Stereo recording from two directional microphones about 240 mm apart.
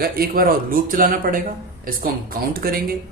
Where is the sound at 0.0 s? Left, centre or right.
Right.